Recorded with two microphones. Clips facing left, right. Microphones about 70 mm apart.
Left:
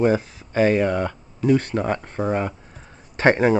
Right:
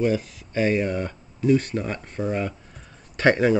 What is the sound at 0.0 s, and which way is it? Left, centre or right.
Speech, left.